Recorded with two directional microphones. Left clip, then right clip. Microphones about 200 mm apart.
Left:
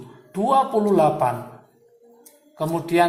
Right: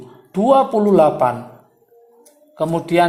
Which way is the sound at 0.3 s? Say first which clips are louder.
Right 5 dB; 40° right (ahead or behind).